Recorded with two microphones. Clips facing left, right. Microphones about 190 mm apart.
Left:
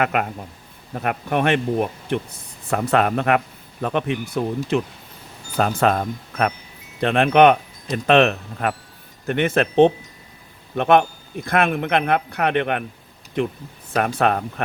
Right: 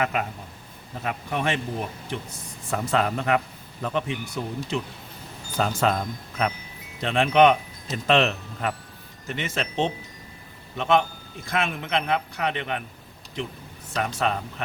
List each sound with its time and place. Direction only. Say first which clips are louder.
0.0 s a man's voice: left 5 dB; 60° left (ahead or behind)